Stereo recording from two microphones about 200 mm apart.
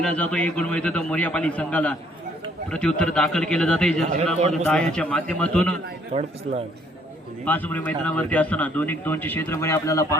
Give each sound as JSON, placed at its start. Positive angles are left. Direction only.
{"t": 0.0, "sound": "a man's voice", "side_deg": 5}
{"t": 4.0, "sound": "a man's voice", "side_deg": -35}
{"t": 4.6, "sound": "a man's voice", "side_deg": 5}
{"t": 6.1, "sound": "a man's voice", "side_deg": -30}
{"t": 7.4, "sound": "a man's voice", "side_deg": 10}